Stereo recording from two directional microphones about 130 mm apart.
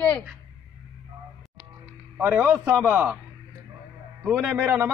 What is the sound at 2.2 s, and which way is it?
Speech, 15° right (ahead or behind).